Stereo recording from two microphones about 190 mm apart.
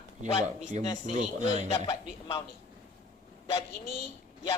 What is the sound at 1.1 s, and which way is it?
Speech, 35° right (ahead or behind).